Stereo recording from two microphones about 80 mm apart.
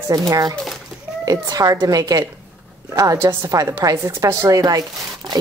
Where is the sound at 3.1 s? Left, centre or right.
Right.